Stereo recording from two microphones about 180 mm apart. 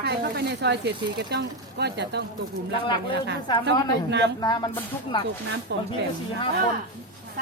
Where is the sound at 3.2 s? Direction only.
75° right (ahead or behind).